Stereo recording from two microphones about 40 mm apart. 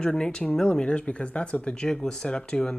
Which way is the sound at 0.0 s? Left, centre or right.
Left.